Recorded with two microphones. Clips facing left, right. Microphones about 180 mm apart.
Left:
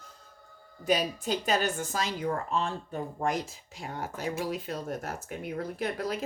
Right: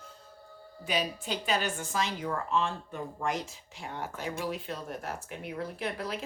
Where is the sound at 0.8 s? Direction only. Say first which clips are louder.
Left 4 dB; 40° left (ahead or behind).